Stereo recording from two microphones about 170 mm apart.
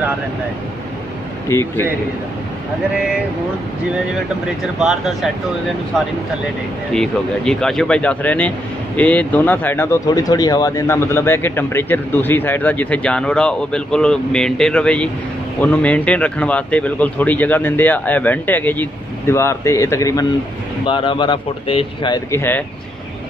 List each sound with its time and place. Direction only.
1.5 s speech: 15° left (ahead or behind)
4.7 s speech: centre (ahead or behind)
6.9 s speech: 5° left (ahead or behind); by 20.2 s 20° left (ahead or behind)
20.8 s speech: 30° left (ahead or behind)
22.3 s speech: 10° left (ahead or behind)